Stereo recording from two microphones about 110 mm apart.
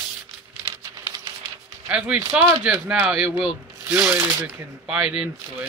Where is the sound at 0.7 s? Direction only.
35° right (ahead or behind).